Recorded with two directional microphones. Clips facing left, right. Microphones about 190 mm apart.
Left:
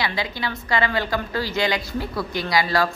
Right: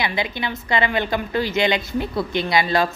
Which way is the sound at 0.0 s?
20° right (ahead or behind).